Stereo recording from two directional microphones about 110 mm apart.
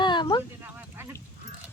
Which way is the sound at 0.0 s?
45° left (ahead or behind).